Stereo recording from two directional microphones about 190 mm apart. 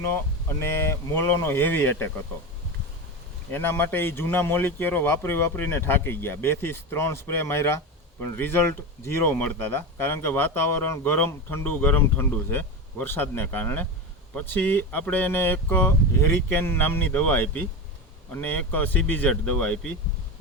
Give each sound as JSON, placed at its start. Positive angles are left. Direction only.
{"t": 0.6, "sound": "speech", "side_deg": 15}
{"t": 3.5, "sound": "speech", "side_deg": 10}